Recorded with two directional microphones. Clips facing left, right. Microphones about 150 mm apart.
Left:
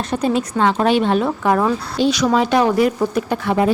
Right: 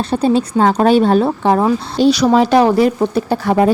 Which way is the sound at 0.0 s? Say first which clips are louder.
Right 4 dB; 30° right (ahead or behind).